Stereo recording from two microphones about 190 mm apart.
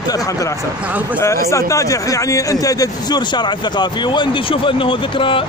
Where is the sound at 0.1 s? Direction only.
15° left (ahead or behind).